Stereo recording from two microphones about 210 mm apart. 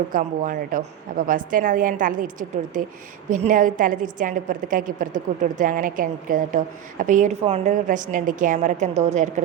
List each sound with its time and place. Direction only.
0.1 s a woman's voice: 40° right (ahead or behind)